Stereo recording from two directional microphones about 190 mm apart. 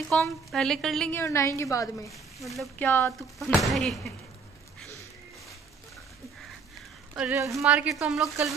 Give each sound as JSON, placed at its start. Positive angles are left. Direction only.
{"t": 0.1, "sound": "a woman's voice", "side_deg": 0}
{"t": 2.0, "sound": "a woman's voice", "side_deg": 0}
{"t": 2.9, "sound": "a woman's voice", "side_deg": 10}
{"t": 3.2, "sound": "a woman's voice", "side_deg": 0}
{"t": 7.2, "sound": "a woman's voice", "side_deg": -10}